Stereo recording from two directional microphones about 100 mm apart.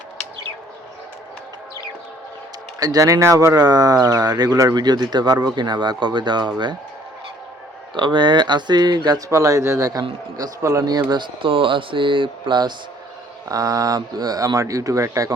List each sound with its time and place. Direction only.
2.8 s speech: 35° right (ahead or behind)
7.9 s speech: 55° right (ahead or behind)
9.3 s speech: 35° right (ahead or behind)
11.1 s speech: 55° right (ahead or behind)
13.5 s speech: 35° right (ahead or behind)